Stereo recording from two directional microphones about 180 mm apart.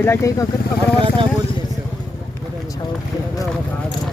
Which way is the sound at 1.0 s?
30° right (ahead or behind).